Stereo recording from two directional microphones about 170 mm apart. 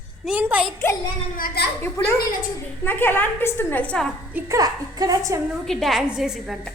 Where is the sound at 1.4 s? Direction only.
65° left (ahead or behind).